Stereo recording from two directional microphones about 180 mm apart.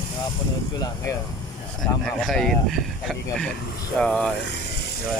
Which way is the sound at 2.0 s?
5° left (ahead or behind).